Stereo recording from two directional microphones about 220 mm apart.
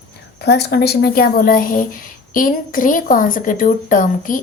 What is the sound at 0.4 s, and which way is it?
A woman's voice, 50° left (ahead or behind).